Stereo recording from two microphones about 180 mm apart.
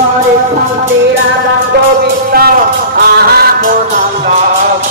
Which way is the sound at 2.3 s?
60° right (ahead or behind).